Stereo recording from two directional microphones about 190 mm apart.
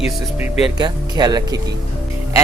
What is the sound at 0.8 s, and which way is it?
Speech, 20° right (ahead or behind).